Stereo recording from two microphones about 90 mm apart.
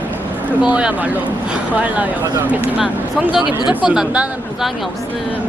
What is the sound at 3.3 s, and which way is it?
Speech, 60° left (ahead or behind).